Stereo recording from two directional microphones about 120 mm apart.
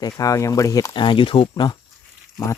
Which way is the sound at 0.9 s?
45° left (ahead or behind).